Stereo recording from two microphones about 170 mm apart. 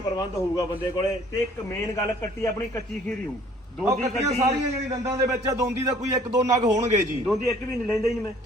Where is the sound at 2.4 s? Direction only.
15° left (ahead or behind).